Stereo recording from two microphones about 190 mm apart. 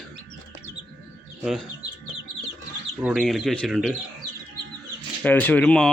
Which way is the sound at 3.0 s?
Centre (ahead or behind).